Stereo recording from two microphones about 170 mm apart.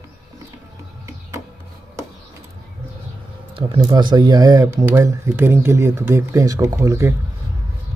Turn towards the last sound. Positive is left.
turn(degrees=-15)  # may be behind; listen again after turning